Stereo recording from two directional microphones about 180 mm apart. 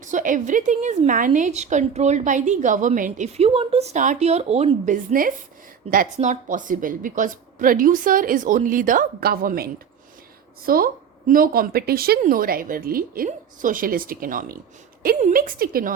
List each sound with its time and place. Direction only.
0.0 s a woman's voice: 45° right (ahead or behind)
5.2 s a woman's voice: 50° right (ahead or behind)